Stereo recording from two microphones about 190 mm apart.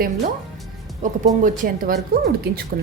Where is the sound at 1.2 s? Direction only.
45° right (ahead or behind).